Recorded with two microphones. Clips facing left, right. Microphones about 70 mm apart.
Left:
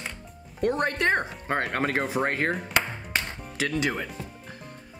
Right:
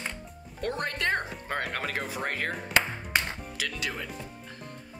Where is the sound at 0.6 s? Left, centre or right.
Left.